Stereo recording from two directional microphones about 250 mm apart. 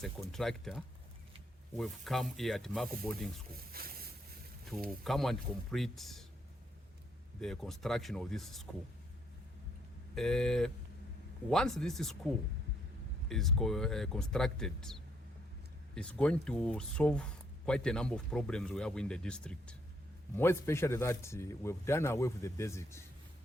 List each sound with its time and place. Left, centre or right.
0.0 s speech: centre
3.5 s boat: right
4.9 s speech: centre
7.4 s speech: centre
10.2 s speech: centre
16.0 s a man's voice: centre